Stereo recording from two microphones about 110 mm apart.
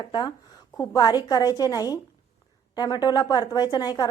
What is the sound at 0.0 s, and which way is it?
A woman's voice, 45° left (ahead or behind).